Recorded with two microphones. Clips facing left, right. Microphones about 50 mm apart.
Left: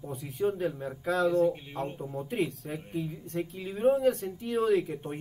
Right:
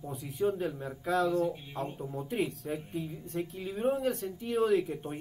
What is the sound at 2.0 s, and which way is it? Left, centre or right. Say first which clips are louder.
Speech: left 2 dB; centre.